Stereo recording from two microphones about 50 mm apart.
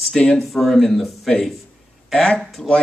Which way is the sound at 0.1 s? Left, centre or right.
Centre.